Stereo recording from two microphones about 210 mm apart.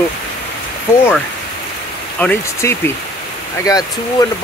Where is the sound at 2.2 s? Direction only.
10° left (ahead or behind).